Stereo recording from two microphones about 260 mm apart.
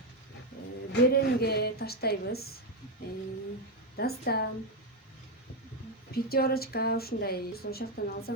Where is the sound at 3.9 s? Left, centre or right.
Left.